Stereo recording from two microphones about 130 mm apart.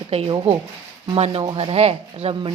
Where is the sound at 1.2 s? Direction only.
50° right (ahead or behind).